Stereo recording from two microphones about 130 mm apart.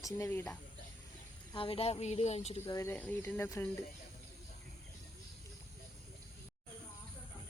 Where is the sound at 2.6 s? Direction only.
20° left (ahead or behind).